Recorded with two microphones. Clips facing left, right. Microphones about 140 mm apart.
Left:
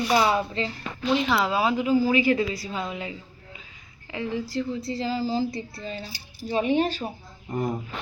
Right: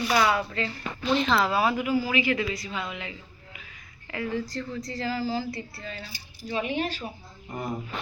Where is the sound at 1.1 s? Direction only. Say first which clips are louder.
Even; 10° left (ahead or behind); by 3.2 s 30° left (ahead or behind).